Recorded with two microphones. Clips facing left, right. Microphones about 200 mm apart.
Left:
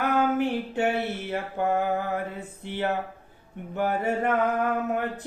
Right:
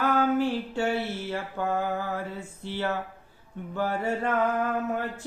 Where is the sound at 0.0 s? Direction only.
20° left (ahead or behind).